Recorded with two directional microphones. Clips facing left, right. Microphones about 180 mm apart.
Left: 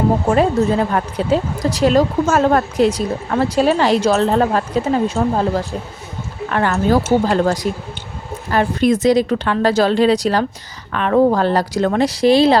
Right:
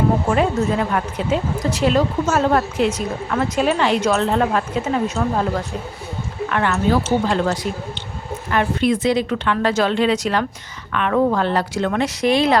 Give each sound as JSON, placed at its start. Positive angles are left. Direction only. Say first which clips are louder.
{"t": 0.3, "sound": "speech", "louder": "left 4 dB", "side_deg": 35}